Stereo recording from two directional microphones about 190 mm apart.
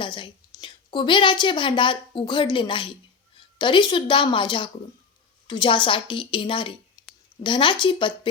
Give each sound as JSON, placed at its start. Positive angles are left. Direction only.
{"t": 0.0, "sound": "a woman's voice", "side_deg": 25}